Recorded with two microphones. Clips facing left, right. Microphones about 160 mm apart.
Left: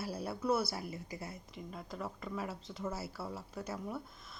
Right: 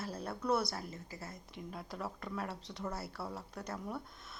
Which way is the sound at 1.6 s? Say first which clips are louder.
Even; centre (ahead or behind).